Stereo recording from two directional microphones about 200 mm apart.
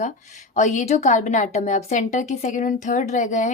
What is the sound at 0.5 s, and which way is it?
Speech, 40° left (ahead or behind).